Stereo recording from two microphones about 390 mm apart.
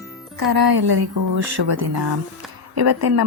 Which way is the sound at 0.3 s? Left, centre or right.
Right.